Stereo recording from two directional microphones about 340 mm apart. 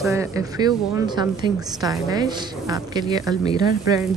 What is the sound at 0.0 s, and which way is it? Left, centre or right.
A woman's voice, centre.